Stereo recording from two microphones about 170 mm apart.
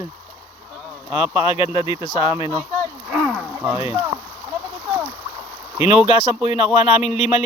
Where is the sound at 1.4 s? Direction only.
35° left (ahead or behind).